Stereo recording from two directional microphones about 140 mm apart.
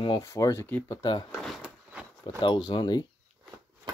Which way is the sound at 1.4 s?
5° right (ahead or behind).